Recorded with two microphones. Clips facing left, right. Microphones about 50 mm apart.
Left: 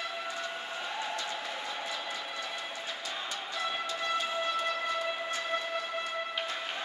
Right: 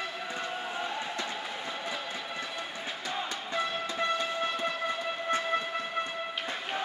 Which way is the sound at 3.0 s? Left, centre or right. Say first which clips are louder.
Right 3 dB; right.